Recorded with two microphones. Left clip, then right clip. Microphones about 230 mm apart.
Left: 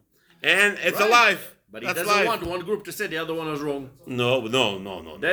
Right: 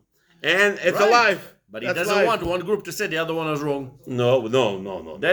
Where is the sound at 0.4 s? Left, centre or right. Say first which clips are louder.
Right 1 dB; centre.